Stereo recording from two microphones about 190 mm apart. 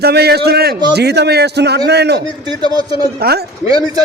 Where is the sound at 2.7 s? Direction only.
20° right (ahead or behind).